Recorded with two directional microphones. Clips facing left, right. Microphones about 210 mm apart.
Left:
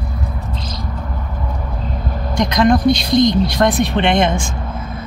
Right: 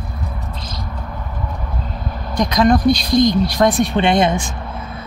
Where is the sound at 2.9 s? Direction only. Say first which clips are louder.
Left 1 dB; 25° left (ahead or behind).